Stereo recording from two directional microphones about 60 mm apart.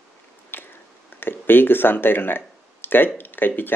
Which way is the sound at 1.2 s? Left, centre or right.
Left.